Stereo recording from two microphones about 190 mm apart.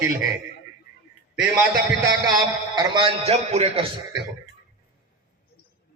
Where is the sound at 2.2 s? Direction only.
20° right (ahead or behind).